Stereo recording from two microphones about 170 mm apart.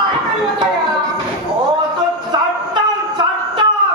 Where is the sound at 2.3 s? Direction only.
25° right (ahead or behind).